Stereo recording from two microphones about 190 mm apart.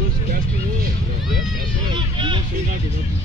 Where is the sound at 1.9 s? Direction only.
25° right (ahead or behind).